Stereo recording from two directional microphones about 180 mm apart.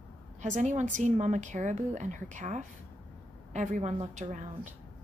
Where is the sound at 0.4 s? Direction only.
45° right (ahead or behind).